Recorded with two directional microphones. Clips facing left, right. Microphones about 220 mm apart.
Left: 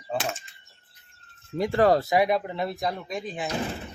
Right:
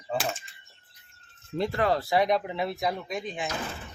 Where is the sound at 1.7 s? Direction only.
40° left (ahead or behind).